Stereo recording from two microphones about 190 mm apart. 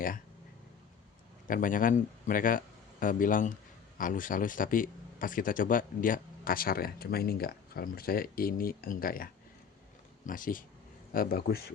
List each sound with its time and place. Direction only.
1.5 s speech: 45° left (ahead or behind)